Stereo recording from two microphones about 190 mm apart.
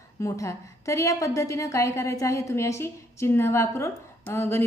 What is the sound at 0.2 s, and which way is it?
A woman's voice, 15° left (ahead or behind).